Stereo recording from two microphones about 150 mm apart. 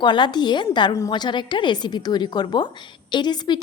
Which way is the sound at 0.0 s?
30° left (ahead or behind).